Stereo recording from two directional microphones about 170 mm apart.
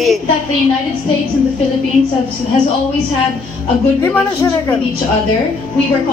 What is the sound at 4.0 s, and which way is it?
Speech, 15° left (ahead or behind).